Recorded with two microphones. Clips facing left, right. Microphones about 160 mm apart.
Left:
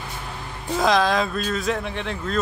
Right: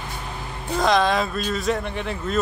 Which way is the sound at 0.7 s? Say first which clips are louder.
Even; centre (ahead or behind).